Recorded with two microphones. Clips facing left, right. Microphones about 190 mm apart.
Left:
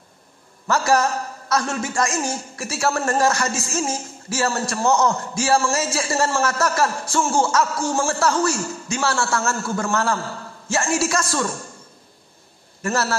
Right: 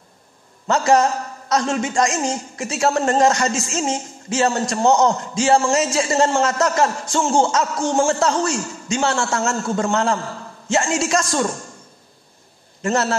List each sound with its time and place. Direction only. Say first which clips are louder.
0.7 s speech: right 3 dB; 20° right (ahead or behind)
12.8 s speech: right 3 dB; 20° right (ahead or behind)